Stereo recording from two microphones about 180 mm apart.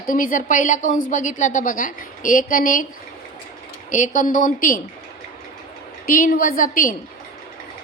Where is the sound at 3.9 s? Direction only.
45° left (ahead or behind).